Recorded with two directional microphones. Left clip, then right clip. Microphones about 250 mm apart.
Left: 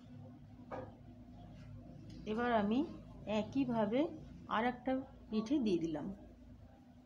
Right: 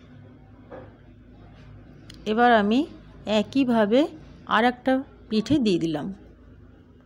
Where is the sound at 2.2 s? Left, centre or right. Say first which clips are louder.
Right 17 dB; right.